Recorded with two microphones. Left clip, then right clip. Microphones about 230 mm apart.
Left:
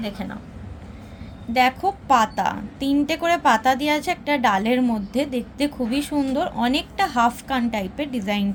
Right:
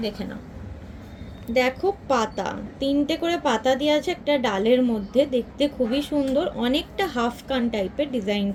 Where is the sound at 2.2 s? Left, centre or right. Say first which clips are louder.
Left 5 dB; left.